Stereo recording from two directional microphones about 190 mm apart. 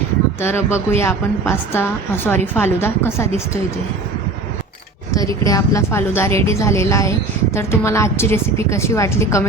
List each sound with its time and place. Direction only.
0.4 s a woman's voice: 15° left (ahead or behind)
5.5 s a woman's voice: 15° left (ahead or behind)